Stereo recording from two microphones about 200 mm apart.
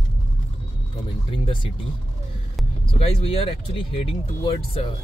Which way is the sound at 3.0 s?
30° left (ahead or behind).